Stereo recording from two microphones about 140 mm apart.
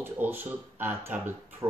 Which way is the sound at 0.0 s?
15° right (ahead or behind).